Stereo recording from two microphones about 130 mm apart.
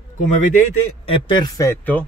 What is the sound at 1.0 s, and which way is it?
Speech, 50° left (ahead or behind).